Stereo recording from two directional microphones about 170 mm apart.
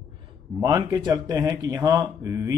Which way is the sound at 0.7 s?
25° right (ahead or behind).